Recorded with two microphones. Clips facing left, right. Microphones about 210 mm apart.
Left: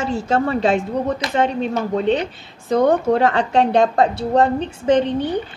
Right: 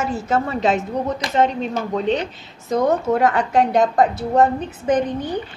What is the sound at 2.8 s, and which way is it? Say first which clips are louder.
A woman's voice: left 2 dB; 30° left (ahead or behind).